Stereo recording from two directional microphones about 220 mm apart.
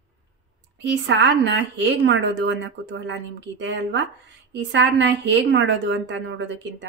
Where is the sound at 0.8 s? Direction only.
50° right (ahead or behind).